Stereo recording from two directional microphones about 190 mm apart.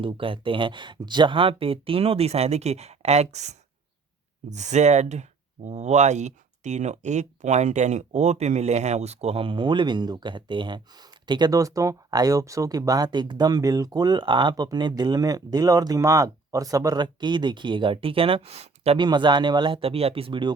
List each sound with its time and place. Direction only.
0.0 s speech: 30° right (ahead or behind)